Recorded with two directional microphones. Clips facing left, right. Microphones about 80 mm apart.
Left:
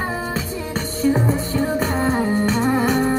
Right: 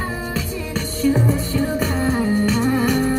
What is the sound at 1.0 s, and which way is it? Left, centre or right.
Music, left.